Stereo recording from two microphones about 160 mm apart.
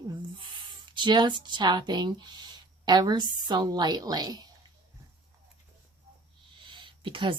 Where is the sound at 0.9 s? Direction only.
30° right (ahead or behind).